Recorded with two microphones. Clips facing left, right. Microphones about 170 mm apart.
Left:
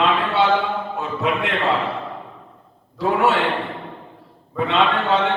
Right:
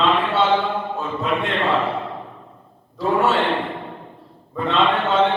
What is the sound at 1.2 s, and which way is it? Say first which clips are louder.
Speech: left 1 dB; 70° left (ahead or behind).